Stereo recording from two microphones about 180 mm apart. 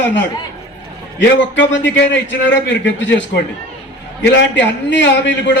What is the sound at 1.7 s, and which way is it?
A man's voice, 85° left.